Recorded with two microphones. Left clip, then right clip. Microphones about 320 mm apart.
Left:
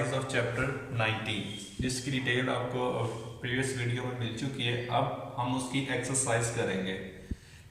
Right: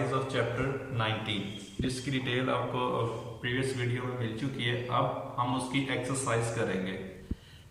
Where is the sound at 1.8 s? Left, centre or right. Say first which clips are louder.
Even; left.